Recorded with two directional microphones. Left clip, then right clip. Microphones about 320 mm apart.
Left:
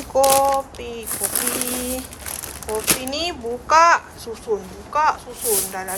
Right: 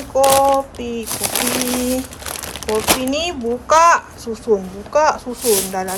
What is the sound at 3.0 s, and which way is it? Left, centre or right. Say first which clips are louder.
A child's voice: right 5 dB; centre.